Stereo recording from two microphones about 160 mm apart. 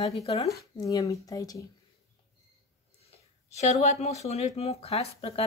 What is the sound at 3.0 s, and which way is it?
Speech, 40° left (ahead or behind).